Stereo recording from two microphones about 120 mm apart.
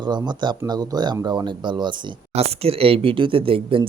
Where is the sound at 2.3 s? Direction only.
55° right (ahead or behind).